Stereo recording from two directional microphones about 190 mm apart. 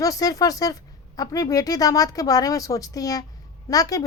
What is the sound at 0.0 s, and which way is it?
A woman's voice, 20° left (ahead or behind).